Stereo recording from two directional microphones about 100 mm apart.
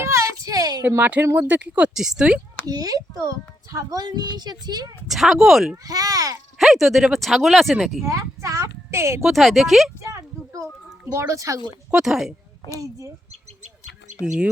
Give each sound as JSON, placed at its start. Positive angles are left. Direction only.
{"t": 0.0, "sound": "a sound", "side_deg": -30}
{"t": 0.9, "sound": "speech", "side_deg": -20}
{"t": 2.0, "sound": "speech", "side_deg": -5}
{"t": 2.6, "sound": "a child's voice", "side_deg": -40}
{"t": 5.0, "sound": "speech", "side_deg": 0}
{"t": 5.7, "sound": "a child's voice", "side_deg": -40}
{"t": 6.6, "sound": "speech", "side_deg": -5}
{"t": 8.1, "sound": "speech", "side_deg": -30}
{"t": 9.2, "sound": "speech", "side_deg": 0}
{"t": 10.0, "sound": "a sound", "side_deg": -30}
{"t": 11.0, "sound": "a child's voice", "side_deg": -25}
{"t": 11.9, "sound": "speech", "side_deg": -5}
{"t": 14.2, "sound": "speech", "side_deg": -10}